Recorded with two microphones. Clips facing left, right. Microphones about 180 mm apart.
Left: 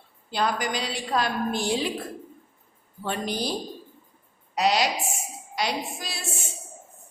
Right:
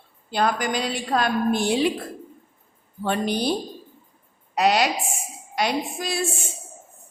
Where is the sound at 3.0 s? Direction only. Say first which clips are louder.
Right 5 dB; 65° right (ahead or behind).